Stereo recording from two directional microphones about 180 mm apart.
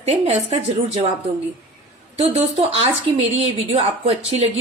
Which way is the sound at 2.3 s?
35° right (ahead or behind).